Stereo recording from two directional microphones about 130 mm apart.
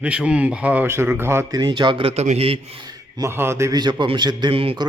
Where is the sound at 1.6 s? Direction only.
35° right (ahead or behind).